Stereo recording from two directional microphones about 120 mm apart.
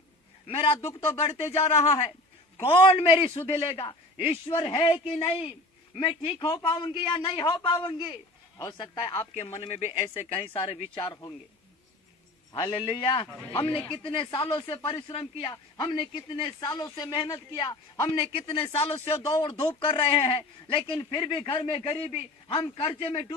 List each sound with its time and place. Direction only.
0.4 s a man's voice: 50° left (ahead or behind)
9.6 s a man's voice: 55° left (ahead or behind)
10.9 s speech: 40° left (ahead or behind)
12.5 s a man's voice: 45° left (ahead or behind)
16.6 s a man's voice: 35° left (ahead or behind); by 19.1 s 50° left (ahead or behind)
19.4 s a man's voice: 40° left (ahead or behind)